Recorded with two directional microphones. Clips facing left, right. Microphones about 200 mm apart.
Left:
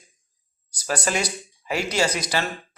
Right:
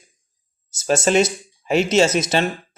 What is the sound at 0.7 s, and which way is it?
A man's voice, 25° right (ahead or behind).